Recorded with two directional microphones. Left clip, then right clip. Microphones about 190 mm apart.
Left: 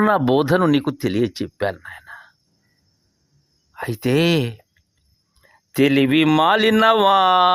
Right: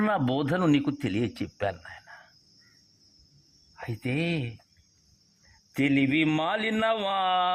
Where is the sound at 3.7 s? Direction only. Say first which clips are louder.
Left 12 dB; 40° left (ahead or behind).